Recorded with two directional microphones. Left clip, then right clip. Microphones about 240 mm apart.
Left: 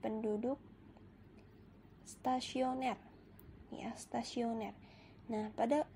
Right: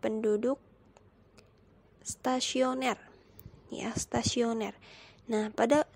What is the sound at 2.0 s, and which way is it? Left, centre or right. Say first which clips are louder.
A woman's voice: right 6 dB; right.